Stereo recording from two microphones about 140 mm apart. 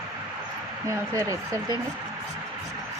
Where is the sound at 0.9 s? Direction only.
20° right (ahead or behind).